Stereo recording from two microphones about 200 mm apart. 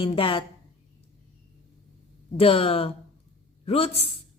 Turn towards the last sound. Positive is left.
turn(degrees=30)  # may be behind; listen again after turning